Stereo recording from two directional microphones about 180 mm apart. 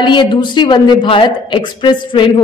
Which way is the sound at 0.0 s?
25° left (ahead or behind).